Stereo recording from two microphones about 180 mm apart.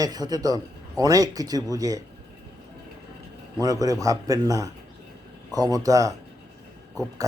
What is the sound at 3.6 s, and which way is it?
Speech, 20° right (ahead or behind).